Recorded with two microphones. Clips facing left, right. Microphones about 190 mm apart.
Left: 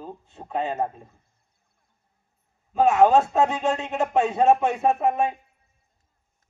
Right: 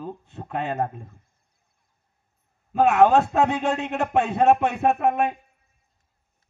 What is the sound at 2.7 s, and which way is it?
A man's voice, 65° right (ahead or behind).